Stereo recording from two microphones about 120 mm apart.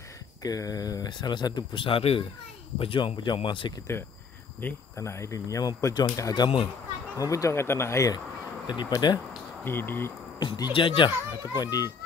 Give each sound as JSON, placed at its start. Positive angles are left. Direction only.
{"t": 0.4, "sound": "speech", "side_deg": 30}
{"t": 4.6, "sound": "speech", "side_deg": 20}
{"t": 9.0, "sound": "speech", "side_deg": 40}
{"t": 9.7, "sound": "speech", "side_deg": 20}
{"t": 10.4, "sound": "speech", "side_deg": 40}
{"t": 11.6, "sound": "speech", "side_deg": 30}